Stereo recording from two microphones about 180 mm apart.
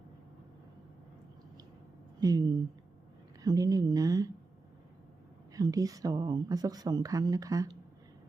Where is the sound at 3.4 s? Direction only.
20° right (ahead or behind).